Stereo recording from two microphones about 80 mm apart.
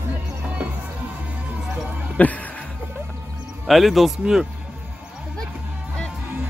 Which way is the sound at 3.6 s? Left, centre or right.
Centre.